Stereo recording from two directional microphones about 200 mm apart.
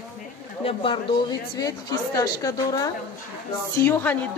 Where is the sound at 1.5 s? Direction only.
20° left (ahead or behind).